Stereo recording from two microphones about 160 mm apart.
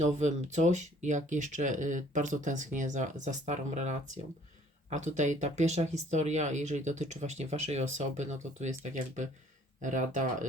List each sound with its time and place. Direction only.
0.0 s speech: 45° right (ahead or behind)